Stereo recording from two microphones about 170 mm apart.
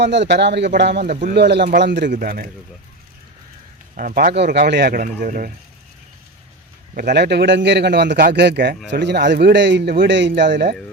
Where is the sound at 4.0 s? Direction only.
55° right (ahead or behind).